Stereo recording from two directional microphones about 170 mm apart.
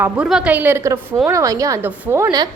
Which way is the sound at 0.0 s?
5° right (ahead or behind).